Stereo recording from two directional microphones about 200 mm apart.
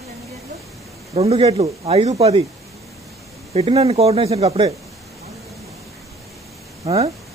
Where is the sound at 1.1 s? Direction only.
35° right (ahead or behind).